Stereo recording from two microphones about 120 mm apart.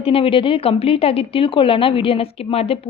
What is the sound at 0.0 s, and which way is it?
A woman's voice, 50° left (ahead or behind).